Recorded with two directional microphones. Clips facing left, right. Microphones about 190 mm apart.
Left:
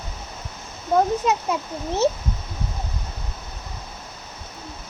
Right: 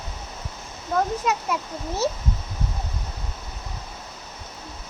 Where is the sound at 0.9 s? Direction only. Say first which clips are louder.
Left 4 dB; 25° left (ahead or behind).